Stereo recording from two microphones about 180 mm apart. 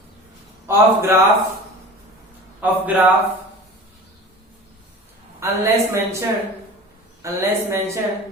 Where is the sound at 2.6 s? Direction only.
10° right (ahead or behind).